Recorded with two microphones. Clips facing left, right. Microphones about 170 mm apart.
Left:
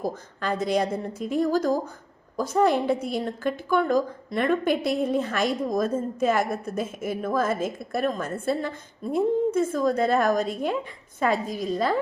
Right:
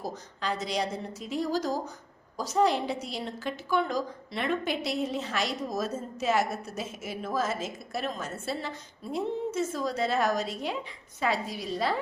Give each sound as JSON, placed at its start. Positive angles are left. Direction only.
{"t": 0.0, "sound": "a woman's voice", "side_deg": 50}